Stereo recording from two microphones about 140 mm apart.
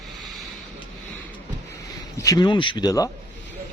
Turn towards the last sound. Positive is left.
turn(degrees=25)  # may be behind; listen again after turning